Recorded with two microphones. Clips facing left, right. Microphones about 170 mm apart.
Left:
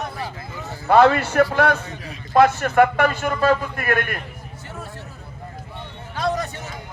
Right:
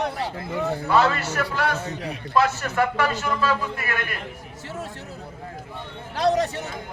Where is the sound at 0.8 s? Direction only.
55° left (ahead or behind).